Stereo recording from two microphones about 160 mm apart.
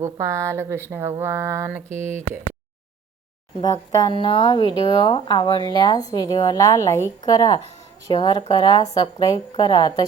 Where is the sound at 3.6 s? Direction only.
25° left (ahead or behind).